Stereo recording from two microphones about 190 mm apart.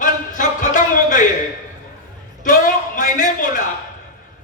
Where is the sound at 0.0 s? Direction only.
45° left (ahead or behind).